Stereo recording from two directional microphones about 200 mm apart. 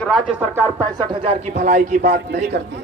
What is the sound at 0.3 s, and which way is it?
Speech, 10° right (ahead or behind).